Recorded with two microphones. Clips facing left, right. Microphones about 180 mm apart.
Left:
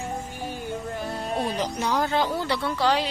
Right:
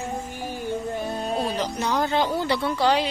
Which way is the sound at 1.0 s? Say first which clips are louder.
Right 3 dB; 25° right (ahead or behind).